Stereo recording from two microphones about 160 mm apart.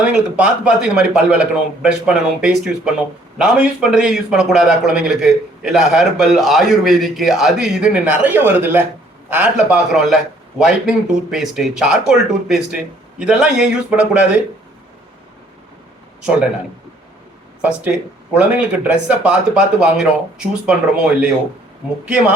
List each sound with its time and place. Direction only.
0.0 s a man's voice: 5° right (ahead or behind)
17.6 s speech: 10° right (ahead or behind)